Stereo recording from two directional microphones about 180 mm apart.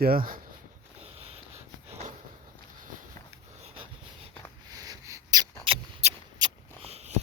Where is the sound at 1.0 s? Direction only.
35° right (ahead or behind).